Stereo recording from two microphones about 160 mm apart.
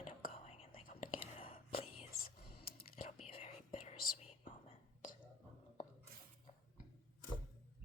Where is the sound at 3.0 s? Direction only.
40° left (ahead or behind).